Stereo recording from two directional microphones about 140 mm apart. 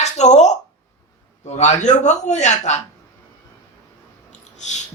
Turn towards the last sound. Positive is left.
turn(degrees=55)  # may be behind; listen again after turning